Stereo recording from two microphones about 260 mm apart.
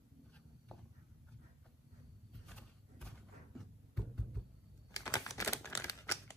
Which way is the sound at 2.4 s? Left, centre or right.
Centre.